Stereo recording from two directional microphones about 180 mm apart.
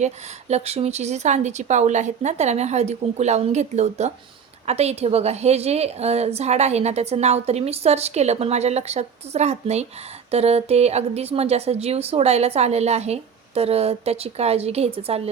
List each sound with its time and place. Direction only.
0.0 s a woman's voice: 40° right (ahead or behind)